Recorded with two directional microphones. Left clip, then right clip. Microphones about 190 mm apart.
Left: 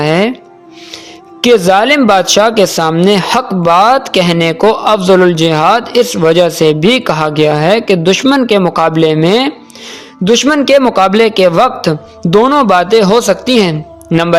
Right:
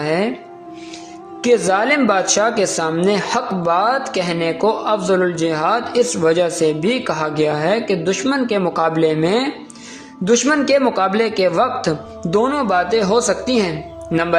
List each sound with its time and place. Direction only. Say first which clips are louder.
0.0 s speech: left 8 dB; 45° left (ahead or behind)
1.4 s speech: left 8 dB; 40° left (ahead or behind)